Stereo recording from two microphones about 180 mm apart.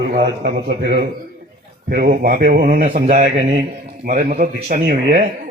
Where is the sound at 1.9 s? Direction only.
55° right (ahead or behind).